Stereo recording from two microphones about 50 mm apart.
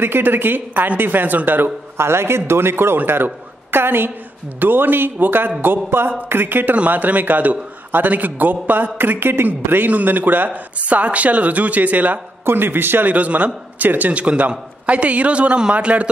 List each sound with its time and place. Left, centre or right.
0.0 s a man's voice: right
2.0 s a man's voice: right
12.4 s a man's voice: right
13.1 s a man's voice: right